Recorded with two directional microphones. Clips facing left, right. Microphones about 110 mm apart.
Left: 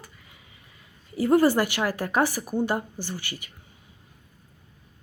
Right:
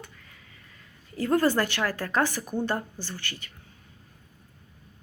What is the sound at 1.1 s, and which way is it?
A woman's voice, 10° left (ahead or behind).